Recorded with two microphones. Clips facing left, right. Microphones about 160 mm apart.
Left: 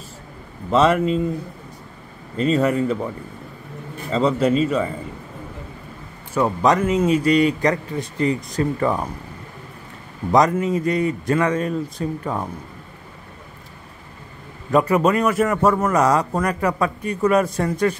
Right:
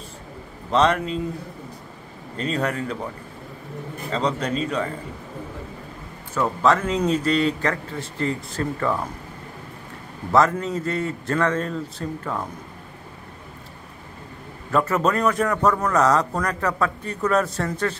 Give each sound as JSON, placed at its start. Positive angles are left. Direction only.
{"t": 0.7, "sound": "speech", "side_deg": 5}
{"t": 2.3, "sound": "speech", "side_deg": 5}
{"t": 4.1, "sound": "speech", "side_deg": 5}
{"t": 6.3, "sound": "a man's voice", "side_deg": 15}
{"t": 10.3, "sound": "a man's voice", "side_deg": 15}
{"t": 14.7, "sound": "a man's voice", "side_deg": 15}